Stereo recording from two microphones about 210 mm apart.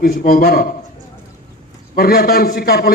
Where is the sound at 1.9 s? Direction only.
45° left (ahead or behind).